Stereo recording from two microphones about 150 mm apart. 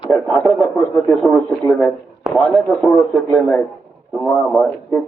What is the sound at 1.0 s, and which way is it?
Speech, centre (ahead or behind).